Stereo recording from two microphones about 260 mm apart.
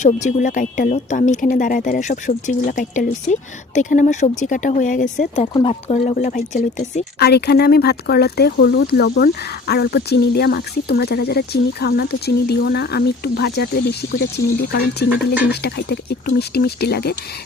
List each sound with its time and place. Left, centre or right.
0.0 s speech: left